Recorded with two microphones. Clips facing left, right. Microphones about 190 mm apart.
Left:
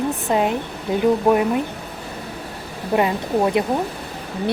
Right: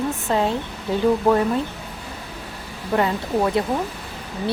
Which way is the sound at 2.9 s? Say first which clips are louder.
Left 2 dB; 20° left (ahead or behind).